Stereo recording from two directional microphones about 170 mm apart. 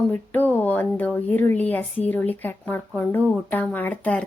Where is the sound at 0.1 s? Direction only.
10° left (ahead or behind).